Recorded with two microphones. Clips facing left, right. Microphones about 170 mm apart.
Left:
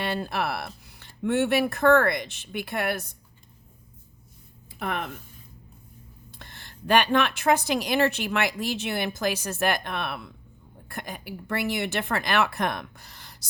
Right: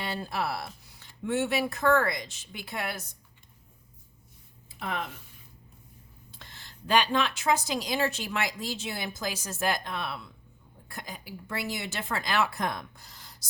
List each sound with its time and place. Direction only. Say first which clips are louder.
0.0 s a sound: left 4 dB; 65° left (ahead or behind)
0.9 s a woman's voice: left 5 dB; 65° left (ahead or behind)
4.8 s a woman's voice: left 3 dB; 60° left (ahead or behind)
6.4 s a woman's voice: left 5 dB; 55° left (ahead or behind)